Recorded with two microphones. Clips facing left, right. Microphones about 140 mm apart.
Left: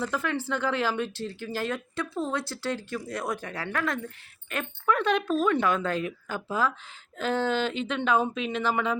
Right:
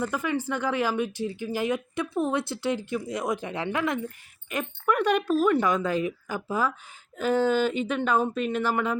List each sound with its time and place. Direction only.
0.0 s speech: 15° right (ahead or behind)